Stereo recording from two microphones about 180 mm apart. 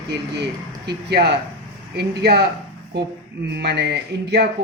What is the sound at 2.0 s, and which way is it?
Speech, 65° right (ahead or behind).